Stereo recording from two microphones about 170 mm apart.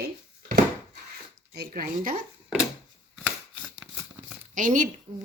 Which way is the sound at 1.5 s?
60° right (ahead or behind).